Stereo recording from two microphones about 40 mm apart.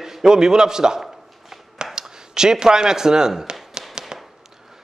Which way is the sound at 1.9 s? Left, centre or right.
Centre.